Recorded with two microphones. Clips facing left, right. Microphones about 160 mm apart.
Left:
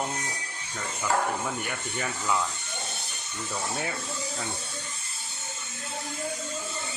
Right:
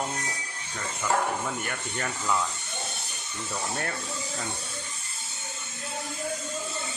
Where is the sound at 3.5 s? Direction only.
5° left (ahead or behind).